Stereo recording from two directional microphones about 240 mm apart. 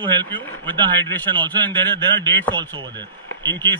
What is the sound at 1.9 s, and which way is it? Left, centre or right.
Speech, centre.